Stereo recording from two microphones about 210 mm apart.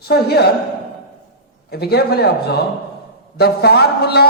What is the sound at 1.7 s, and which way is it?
A man's voice, 50° left (ahead or behind).